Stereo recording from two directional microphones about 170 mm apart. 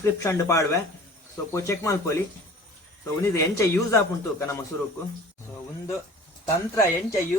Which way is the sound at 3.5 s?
15° left (ahead or behind).